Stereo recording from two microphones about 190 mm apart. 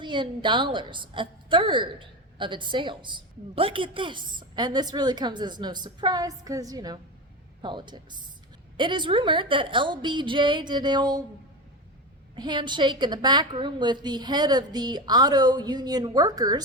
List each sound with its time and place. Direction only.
0.0 s a woman's voice: 25° right (ahead or behind)
12.4 s a woman's voice: 25° right (ahead or behind)